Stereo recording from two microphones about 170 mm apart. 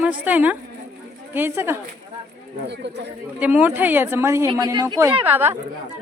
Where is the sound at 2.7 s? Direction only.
80° right.